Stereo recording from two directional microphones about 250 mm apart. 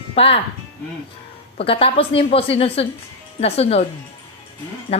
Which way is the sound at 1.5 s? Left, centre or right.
Left.